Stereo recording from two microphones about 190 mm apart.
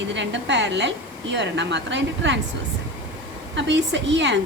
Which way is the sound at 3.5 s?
70° right (ahead or behind).